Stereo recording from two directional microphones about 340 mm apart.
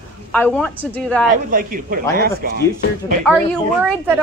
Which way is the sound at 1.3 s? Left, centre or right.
Right.